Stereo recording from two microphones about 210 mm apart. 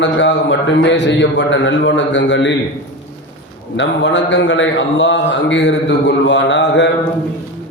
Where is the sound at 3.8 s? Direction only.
55° left (ahead or behind).